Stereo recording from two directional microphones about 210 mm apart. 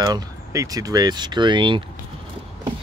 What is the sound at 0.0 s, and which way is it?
Speech, 15° right (ahead or behind).